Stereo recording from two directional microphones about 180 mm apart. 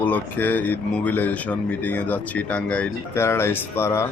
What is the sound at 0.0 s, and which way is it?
Speech, 10° left (ahead or behind).